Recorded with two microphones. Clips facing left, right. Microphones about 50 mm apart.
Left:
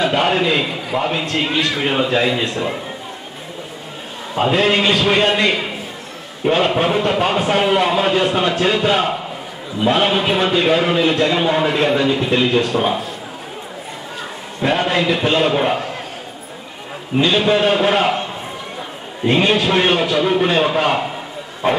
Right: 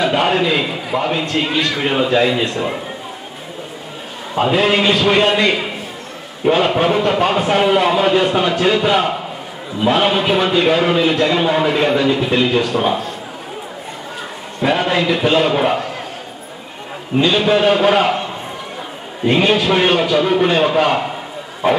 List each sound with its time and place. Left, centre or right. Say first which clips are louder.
0.0 s a man's voice: right 1 dB; centre
4.4 s a man's voice: right 1 dB; centre
14.6 s a man's voice: right 1 dB; centre
17.2 s a man's voice: right 1 dB; centre